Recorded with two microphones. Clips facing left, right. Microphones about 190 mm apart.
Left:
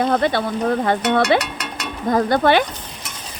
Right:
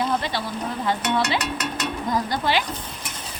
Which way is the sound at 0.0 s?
55° left (ahead or behind).